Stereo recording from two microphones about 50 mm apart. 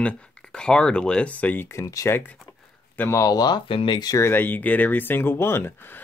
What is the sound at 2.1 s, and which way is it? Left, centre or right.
Speech, left.